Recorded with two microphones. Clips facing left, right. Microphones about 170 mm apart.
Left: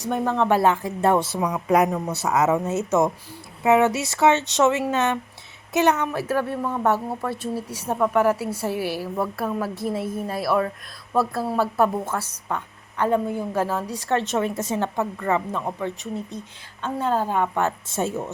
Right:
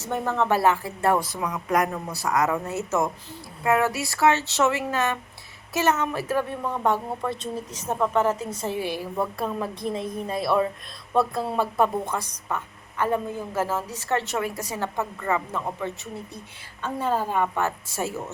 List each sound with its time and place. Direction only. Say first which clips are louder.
0.0 s a woman's voice: left 3 dB; 15° left (ahead or behind)
11.5 s a woman's voice: left 2 dB; 15° right (ahead or behind)
13.0 s a woman's voice: left 4 dB; 15° left (ahead or behind)
16.8 s a woman's voice: left 2 dB; 10° right (ahead or behind)
17.5 s speech: left 3 dB; 20° left (ahead or behind)